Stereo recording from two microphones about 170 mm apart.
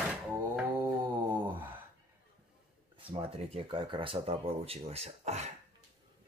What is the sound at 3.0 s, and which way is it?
Speech, 30° right (ahead or behind).